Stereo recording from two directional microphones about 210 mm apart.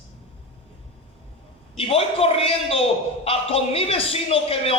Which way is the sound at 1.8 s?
25° left (ahead or behind).